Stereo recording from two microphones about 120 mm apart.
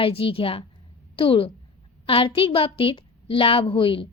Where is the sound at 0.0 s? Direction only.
50° left (ahead or behind).